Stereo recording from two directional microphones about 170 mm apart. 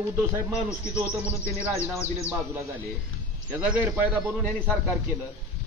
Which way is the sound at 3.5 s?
10° right (ahead or behind).